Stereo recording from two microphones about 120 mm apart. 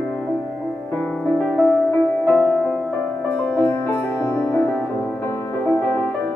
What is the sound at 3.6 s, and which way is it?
Music, 20° left (ahead or behind).